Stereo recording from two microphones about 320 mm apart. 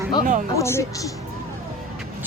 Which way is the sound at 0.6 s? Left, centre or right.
Centre.